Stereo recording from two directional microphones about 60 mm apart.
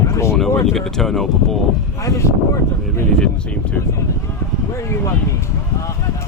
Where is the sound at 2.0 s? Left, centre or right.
Left.